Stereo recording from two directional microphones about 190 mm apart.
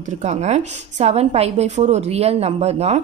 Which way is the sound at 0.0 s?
40° right (ahead or behind).